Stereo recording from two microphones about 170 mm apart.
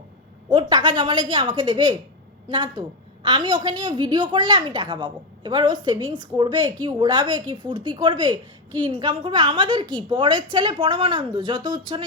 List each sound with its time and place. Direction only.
0.5 s a woman's voice: 25° right (ahead or behind)